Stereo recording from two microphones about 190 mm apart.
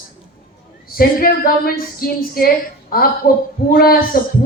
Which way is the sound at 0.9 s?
50° left (ahead or behind).